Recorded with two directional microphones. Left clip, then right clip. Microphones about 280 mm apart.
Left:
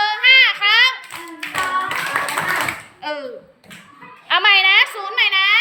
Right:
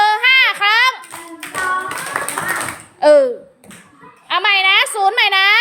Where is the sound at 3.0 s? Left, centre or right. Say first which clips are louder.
Right 17 dB; centre.